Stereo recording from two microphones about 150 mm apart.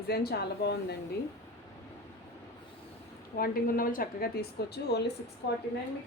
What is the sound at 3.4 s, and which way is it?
A woman's voice, 70° left (ahead or behind).